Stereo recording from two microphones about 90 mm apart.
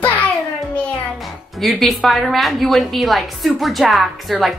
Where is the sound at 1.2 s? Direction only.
Centre (ahead or behind).